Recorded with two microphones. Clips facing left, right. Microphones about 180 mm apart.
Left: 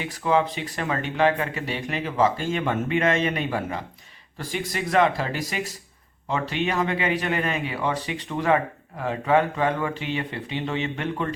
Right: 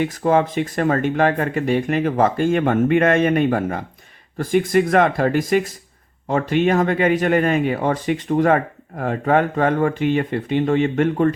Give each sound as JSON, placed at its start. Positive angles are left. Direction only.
{"t": 0.0, "sound": "speech", "side_deg": -45}